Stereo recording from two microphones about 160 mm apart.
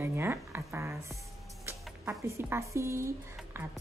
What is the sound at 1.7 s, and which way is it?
Music, 15° right (ahead or behind).